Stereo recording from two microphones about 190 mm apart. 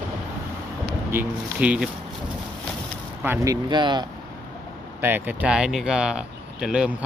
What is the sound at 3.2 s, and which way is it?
Speech, 15° right (ahead or behind).